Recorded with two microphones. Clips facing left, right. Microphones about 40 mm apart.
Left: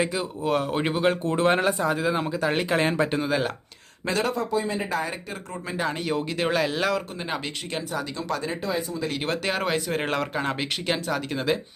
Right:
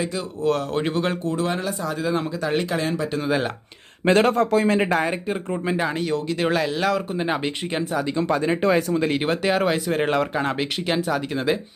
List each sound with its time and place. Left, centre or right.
0.1 s speech: centre
1.2 s speech: left
1.9 s speech: centre
2.7 s speech: left
3.2 s speech: centre
4.0 s speech: right
4.5 s speech: right
4.8 s speech: right
5.3 s speech: right
5.7 s speech: centre
6.1 s speech: centre
7.2 s speech: centre
8.6 s speech: right
9.2 s speech: centre